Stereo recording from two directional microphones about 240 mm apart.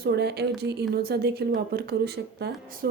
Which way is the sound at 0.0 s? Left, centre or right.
Right.